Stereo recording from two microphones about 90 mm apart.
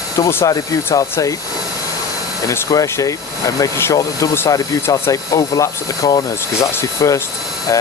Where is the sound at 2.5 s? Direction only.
35° left (ahead or behind).